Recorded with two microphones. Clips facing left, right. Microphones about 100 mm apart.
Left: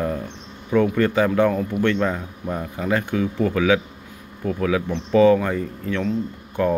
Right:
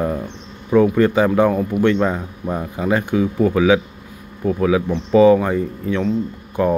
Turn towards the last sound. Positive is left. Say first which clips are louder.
# right 3 dB
turn(degrees=-15)  # may be behind; listen again after turning